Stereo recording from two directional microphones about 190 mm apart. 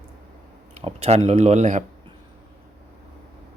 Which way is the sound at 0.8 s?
30° right (ahead or behind).